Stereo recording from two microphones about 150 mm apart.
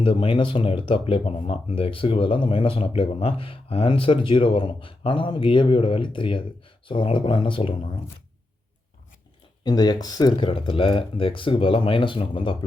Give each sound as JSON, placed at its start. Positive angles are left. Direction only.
{"t": 0.0, "sound": "speech", "side_deg": 35}
{"t": 9.6, "sound": "speech", "side_deg": 25}